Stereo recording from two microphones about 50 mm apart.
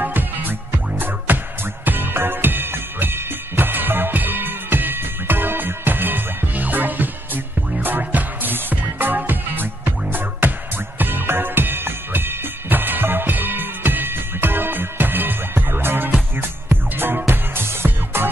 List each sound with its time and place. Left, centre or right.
0.0 s music: right